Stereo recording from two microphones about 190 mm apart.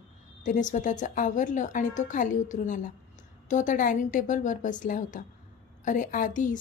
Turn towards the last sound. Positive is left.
turn(degrees=45)  # may be behind; listen again after turning